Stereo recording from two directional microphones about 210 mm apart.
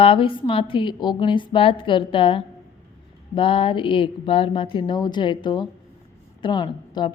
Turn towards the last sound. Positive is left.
turn(degrees=20)  # may be behind; listen again after turning